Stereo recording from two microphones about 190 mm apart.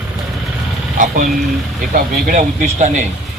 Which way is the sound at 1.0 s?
45° right (ahead or behind).